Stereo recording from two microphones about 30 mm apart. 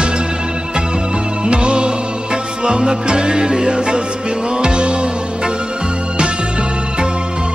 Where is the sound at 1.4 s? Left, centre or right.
Right.